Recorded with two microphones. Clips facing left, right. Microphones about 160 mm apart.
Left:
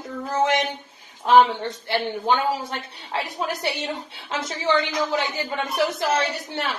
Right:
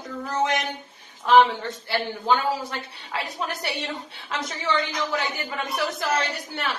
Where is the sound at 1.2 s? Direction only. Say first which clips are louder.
Left 1 dB; 20° left (ahead or behind).